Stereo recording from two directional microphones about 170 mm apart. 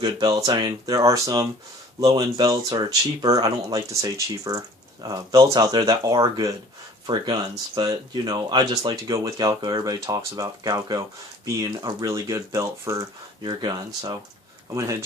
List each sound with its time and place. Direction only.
0.0 s speech: 20° right (ahead or behind)